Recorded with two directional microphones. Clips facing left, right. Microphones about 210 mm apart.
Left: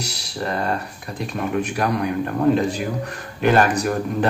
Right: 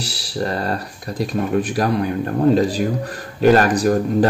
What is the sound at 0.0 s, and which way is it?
Speech, 35° right (ahead or behind).